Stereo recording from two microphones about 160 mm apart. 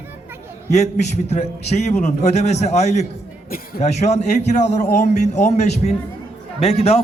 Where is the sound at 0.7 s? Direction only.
45° left (ahead or behind).